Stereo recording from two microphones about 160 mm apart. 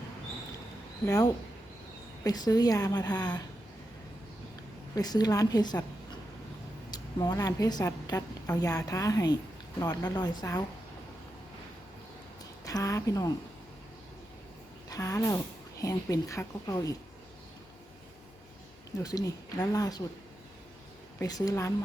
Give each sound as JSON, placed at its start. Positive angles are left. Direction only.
{"t": 1.0, "sound": "a woman's voice", "side_deg": 20}
{"t": 4.9, "sound": "a woman's voice", "side_deg": 25}
{"t": 6.9, "sound": "a woman's voice", "side_deg": 25}
{"t": 12.6, "sound": "a woman's voice", "side_deg": 20}
{"t": 14.8, "sound": "a woman's voice", "side_deg": 20}
{"t": 19.0, "sound": "a woman's voice", "side_deg": 20}
{"t": 21.2, "sound": "a woman's voice", "side_deg": 20}